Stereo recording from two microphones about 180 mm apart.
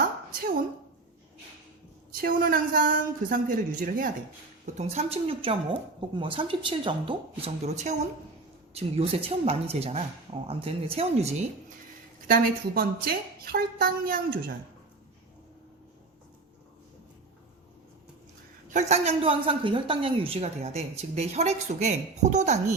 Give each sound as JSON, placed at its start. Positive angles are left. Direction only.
{"t": 2.2, "sound": "a man's voice", "side_deg": -50}
{"t": 4.6, "sound": "a woman's voice", "side_deg": -40}
{"t": 12.3, "sound": "a woman's voice", "side_deg": -55}
{"t": 18.7, "sound": "a woman's voice", "side_deg": -35}